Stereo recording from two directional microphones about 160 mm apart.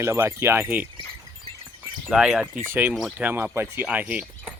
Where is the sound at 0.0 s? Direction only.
15° right (ahead or behind).